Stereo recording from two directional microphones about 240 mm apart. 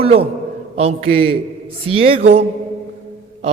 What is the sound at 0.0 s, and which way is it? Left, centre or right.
A man's voice, right.